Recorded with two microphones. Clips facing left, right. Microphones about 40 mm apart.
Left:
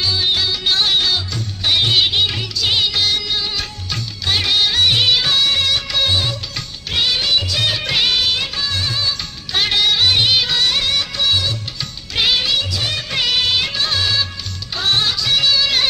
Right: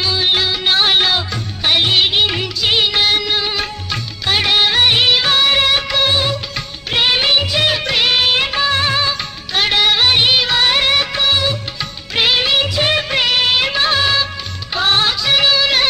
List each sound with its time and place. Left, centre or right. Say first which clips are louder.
0.0 s music: right 2 dB; right
3.5 s music of bollywood: right 4 dB; right
5.9 s music: right 3 dB; centre
6.9 s music of bollywood: right 3 dB; right
7.8 s music of bollywood: right 2 dB; centre
8.1 s music of bollywood: right 4 dB; right
9.5 s music of bollywood: right 2 dB; centre
10.7 s music of bollywood: right 4 dB; right
11.2 s music of bollywood: right 3 dB; right
12.4 s music: right 4 dB; right
13.1 s music of bollywood: right 3 dB; centre